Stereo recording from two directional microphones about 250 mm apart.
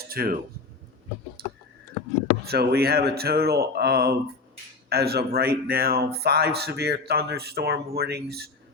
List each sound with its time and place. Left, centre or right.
0.1 s speech: right
2.5 s speech: right